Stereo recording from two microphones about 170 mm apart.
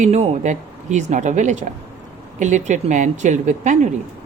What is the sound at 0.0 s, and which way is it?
Speech, 40° right (ahead or behind).